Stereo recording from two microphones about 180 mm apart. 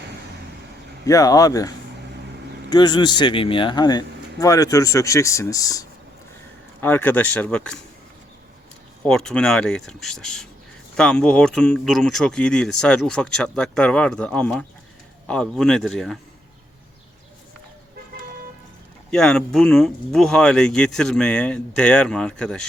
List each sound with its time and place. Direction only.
1.0 s speech: 20° left (ahead or behind)
6.8 s speech: 10° left (ahead or behind)
9.0 s speech: 5° left (ahead or behind)
19.1 s speech: 5° left (ahead or behind)